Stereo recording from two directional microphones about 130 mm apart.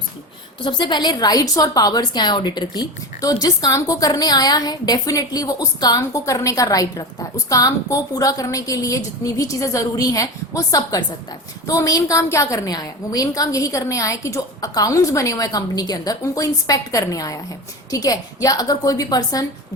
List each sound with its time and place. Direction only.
0.6 s a woman's voice: 35° left (ahead or behind)